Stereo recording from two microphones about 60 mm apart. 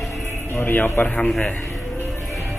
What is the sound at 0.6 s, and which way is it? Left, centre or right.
Speech, left.